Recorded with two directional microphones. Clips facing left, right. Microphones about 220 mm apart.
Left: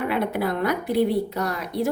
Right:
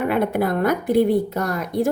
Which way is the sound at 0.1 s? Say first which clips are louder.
Right 4 dB; 50° right (ahead or behind).